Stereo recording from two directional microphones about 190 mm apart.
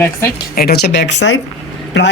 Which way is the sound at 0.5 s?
55° left (ahead or behind).